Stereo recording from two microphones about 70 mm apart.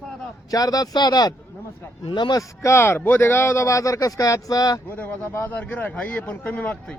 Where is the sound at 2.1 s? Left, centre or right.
Left.